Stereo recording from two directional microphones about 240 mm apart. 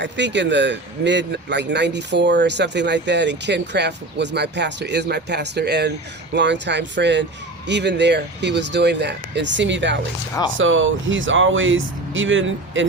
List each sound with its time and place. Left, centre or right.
0.0 s speech: right